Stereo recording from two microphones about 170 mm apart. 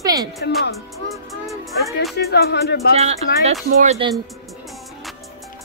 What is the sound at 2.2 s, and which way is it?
Music, 70° left (ahead or behind).